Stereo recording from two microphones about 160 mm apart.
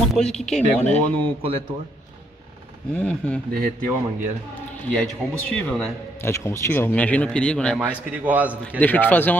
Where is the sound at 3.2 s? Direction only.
10° left (ahead or behind).